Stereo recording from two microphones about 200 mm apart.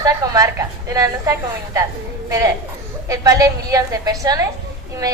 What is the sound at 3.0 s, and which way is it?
A woman's voice, 15° right (ahead or behind).